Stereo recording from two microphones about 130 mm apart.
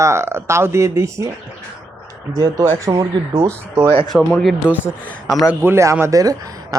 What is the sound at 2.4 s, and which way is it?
Speech, 25° right (ahead or behind).